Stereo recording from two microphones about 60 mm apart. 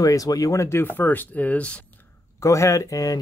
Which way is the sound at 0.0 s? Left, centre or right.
Left.